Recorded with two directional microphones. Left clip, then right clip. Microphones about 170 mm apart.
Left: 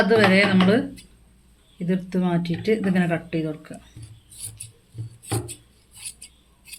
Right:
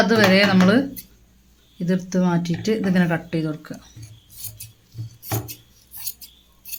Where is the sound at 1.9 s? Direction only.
35° right (ahead or behind).